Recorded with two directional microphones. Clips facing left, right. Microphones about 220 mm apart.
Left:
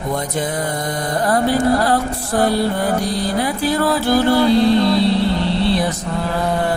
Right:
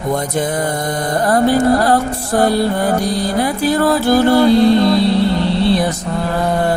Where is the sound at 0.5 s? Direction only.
45° right (ahead or behind).